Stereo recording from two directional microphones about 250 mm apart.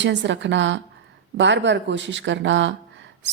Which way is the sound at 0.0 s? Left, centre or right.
Right.